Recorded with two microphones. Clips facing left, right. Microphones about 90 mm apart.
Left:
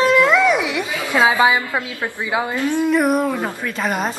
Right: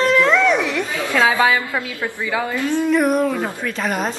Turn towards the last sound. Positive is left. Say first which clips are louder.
# even
turn(degrees=0)  # may be behind; listen again after turning